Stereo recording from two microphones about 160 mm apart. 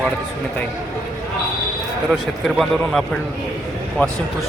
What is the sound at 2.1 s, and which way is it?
Speech, centre (ahead or behind).